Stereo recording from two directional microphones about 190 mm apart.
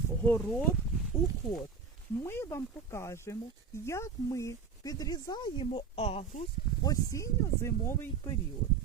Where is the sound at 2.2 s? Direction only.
15° left (ahead or behind); by 6.4 s 30° left (ahead or behind).